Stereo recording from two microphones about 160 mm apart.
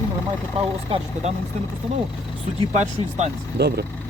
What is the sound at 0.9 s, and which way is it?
Speech, 35° right (ahead or behind).